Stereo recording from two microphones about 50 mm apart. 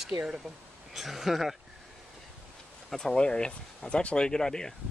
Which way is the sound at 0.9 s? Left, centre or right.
Centre.